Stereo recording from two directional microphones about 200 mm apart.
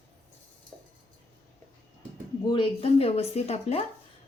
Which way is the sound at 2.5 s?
25° left (ahead or behind).